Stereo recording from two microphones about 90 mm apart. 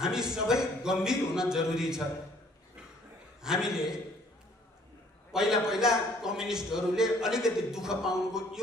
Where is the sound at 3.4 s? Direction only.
5° right (ahead or behind).